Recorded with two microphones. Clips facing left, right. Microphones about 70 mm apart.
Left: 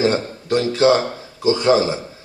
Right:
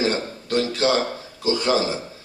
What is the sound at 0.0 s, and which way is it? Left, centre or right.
A man's voice, left.